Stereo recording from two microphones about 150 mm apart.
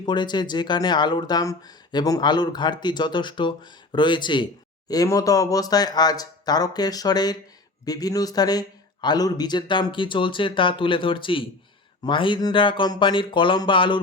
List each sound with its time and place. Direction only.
0.0 s a man's voice: 30° left (ahead or behind)